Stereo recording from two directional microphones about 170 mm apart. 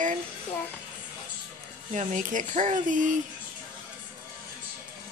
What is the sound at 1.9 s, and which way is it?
Speech, 45° right (ahead or behind).